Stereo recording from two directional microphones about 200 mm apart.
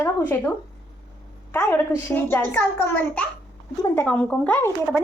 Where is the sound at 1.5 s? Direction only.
10° left (ahead or behind).